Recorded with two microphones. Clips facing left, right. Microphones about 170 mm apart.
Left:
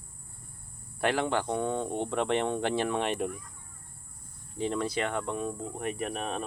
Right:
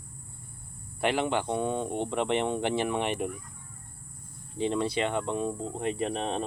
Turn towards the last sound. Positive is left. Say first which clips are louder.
# right 3 dB
turn(degrees=-25)  # may be behind; listen again after turning